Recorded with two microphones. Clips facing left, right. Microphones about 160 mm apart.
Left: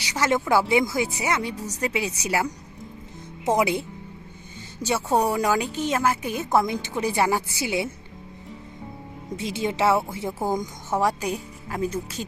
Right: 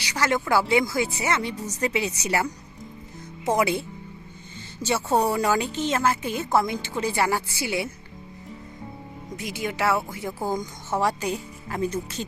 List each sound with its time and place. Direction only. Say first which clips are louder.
0.0 s speech: left 1 dB; 20° left (ahead or behind)
5.1 s speech: even; 10° left (ahead or behind)
9.3 s speech: left 4 dB; 25° left (ahead or behind)
11.0 s speech: even; 10° left (ahead or behind)